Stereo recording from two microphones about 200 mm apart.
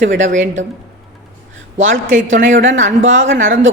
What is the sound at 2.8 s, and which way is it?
Speech, 70° right (ahead or behind).